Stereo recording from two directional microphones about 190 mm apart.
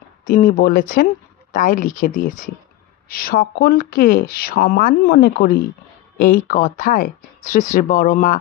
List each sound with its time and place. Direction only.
0.3 s speech: 45° left (ahead or behind)